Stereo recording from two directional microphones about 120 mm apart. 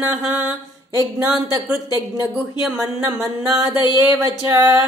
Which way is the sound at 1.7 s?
10° right (ahead or behind).